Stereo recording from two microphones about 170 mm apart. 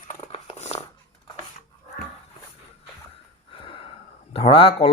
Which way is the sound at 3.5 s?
30° left (ahead or behind).